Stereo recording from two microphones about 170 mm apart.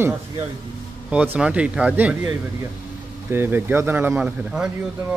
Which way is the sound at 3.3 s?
10° right (ahead or behind).